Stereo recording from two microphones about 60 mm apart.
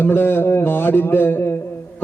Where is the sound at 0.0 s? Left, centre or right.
Left.